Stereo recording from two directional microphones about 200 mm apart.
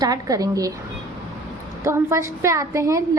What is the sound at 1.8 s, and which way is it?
A woman's voice, 15° right (ahead or behind).